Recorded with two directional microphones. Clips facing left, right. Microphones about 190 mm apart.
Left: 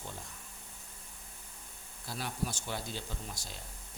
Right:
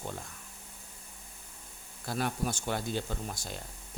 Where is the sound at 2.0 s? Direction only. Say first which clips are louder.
Right 6 dB; 55° right (ahead or behind).